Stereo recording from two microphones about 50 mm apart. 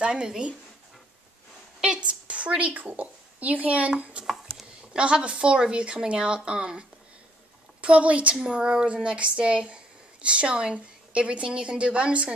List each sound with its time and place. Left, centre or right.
0.0 s speech: centre
1.8 s a woman's voice: right
8.4 s a woman's voice: centre